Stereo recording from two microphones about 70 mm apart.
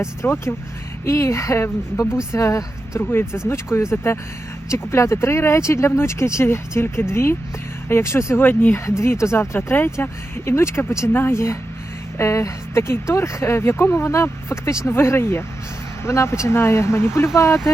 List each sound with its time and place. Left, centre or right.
0.0 s speech: left
3.0 s speech: left